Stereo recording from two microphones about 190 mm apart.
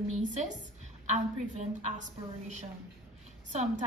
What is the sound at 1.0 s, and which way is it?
A woman's voice, 35° right (ahead or behind).